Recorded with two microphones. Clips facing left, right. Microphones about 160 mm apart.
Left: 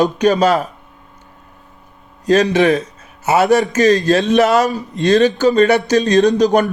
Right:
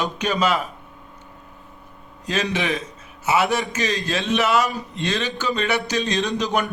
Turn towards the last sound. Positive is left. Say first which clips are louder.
# left 11 dB
turn(degrees=40)  # may be behind; listen again after turning